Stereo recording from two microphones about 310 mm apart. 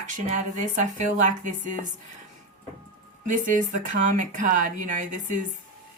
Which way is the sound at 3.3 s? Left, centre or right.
Right.